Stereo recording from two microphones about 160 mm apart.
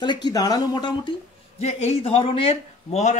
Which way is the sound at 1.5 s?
40° left (ahead or behind).